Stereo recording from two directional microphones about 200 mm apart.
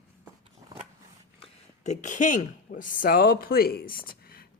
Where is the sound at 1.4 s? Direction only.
35° left (ahead or behind).